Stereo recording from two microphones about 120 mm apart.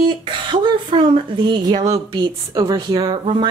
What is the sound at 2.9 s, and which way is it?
Speech, 40° right (ahead or behind).